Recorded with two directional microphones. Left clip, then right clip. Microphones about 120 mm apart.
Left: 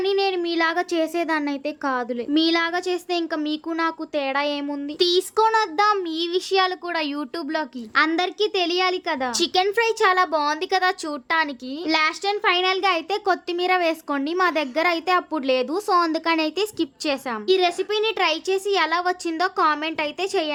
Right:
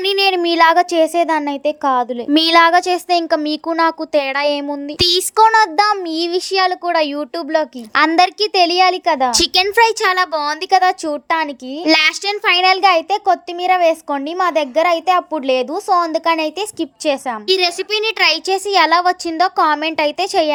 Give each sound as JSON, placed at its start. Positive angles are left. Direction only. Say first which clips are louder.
{"t": 0.0, "sound": "a child's voice", "louder": "right 7 dB", "side_deg": -90}
{"t": 2.3, "sound": "a child's voice", "louder": "right 11 dB", "side_deg": -90}
{"t": 4.9, "sound": "speech", "louder": "right 5 dB", "side_deg": -80}
{"t": 5.4, "sound": "a child's voice", "louder": "right 9 dB", "side_deg": -50}
{"t": 7.9, "sound": "speech", "louder": "right 8 dB", "side_deg": -75}
{"t": 9.3, "sound": "speech", "louder": "right 7 dB", "side_deg": -85}
{"t": 9.7, "sound": "a child's voice", "louder": "right 6 dB", "side_deg": -60}
{"t": 11.0, "sound": "a child's voice", "louder": "right 5 dB", "side_deg": -30}
{"t": 11.9, "sound": "speech", "louder": "right 7 dB", "side_deg": -90}
{"t": 13.1, "sound": "speech", "louder": "right 7 dB", "side_deg": -20}
{"t": 17.5, "sound": "speech", "louder": "right 4 dB", "side_deg": -65}